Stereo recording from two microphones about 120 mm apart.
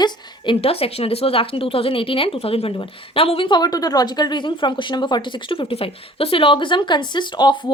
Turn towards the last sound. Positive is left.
turn(degrees=40)  # may be behind; listen again after turning